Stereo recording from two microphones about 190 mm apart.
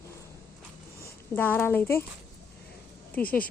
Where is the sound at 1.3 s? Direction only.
10° left (ahead or behind).